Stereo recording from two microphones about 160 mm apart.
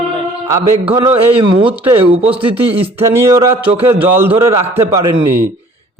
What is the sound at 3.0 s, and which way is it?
A man's voice, 15° right (ahead or behind).